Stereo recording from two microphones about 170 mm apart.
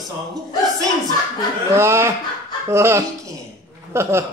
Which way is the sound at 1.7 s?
15° right (ahead or behind).